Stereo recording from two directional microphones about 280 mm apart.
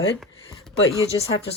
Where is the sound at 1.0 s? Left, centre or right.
Left.